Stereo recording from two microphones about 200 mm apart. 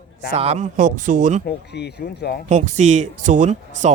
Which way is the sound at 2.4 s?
35° right (ahead or behind).